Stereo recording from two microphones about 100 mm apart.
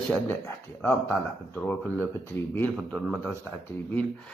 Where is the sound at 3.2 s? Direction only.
20° left (ahead or behind).